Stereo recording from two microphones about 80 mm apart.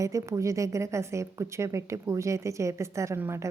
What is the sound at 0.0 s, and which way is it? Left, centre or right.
A woman's voice, right.